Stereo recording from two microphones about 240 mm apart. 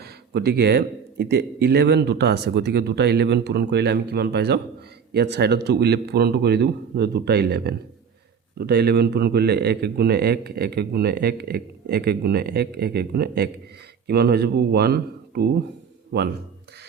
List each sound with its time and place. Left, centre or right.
0.0 s a man's voice: right